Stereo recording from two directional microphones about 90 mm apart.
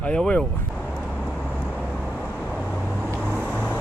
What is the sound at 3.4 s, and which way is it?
Vehicle, 15° left (ahead or behind).